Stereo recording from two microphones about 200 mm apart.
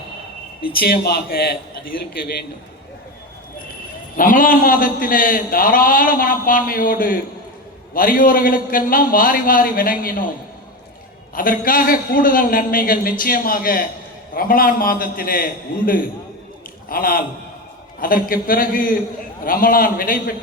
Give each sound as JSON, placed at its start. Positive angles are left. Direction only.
{"t": 0.6, "sound": "a man's voice", "side_deg": 50}
{"t": 4.2, "sound": "a man's voice", "side_deg": 45}
{"t": 11.3, "sound": "a man's voice", "side_deg": 45}
{"t": 16.9, "sound": "a man's voice", "side_deg": 45}